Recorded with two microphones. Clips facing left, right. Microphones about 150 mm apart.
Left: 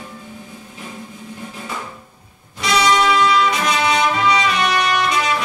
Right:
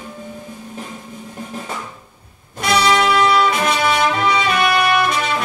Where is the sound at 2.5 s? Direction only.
55° right (ahead or behind).